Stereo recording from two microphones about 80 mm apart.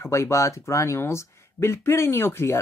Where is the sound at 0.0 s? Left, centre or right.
Left.